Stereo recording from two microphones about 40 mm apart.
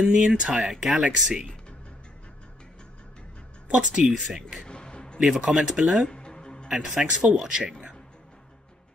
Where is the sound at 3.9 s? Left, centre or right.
Centre.